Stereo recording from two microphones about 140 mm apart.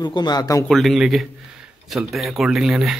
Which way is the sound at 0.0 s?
30° left (ahead or behind).